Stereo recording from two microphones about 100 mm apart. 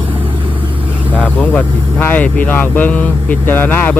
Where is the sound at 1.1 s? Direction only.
15° left (ahead or behind).